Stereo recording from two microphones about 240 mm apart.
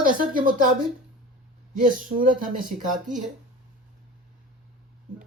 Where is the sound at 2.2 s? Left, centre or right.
Right.